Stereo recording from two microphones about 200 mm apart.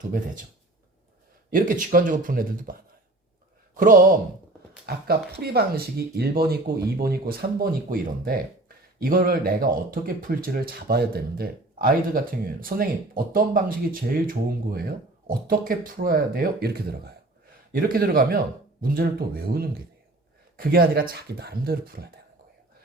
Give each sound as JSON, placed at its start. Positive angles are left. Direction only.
{"t": 1.5, "sound": "speech", "side_deg": -45}